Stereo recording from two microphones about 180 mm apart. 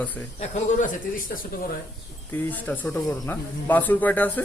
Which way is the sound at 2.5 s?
10° left (ahead or behind).